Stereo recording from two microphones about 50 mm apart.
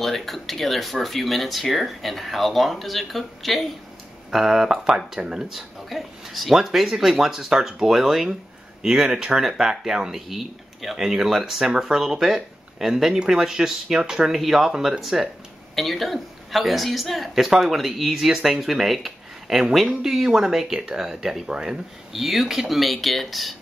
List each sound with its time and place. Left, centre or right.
0.0 s speech: centre
22.1 s speech: centre